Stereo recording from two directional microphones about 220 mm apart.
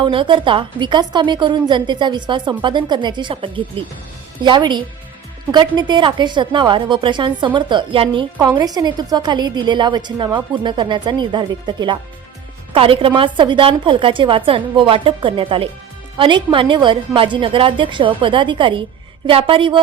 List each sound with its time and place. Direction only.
0.0 s a woman's voice: 20° right (ahead or behind)